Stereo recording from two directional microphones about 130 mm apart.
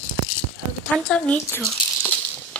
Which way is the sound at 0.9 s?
10° left (ahead or behind).